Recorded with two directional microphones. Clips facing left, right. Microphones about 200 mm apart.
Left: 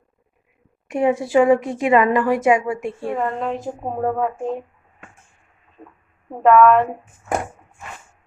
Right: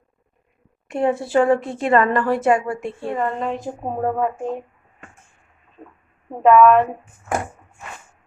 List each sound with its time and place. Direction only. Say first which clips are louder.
0.9 s a woman's voice: left 2 dB; 15° left (ahead or behind)
3.2 s a woman's voice: right 2 dB; centre (ahead or behind)
6.4 s a woman's voice: even; centre (ahead or behind)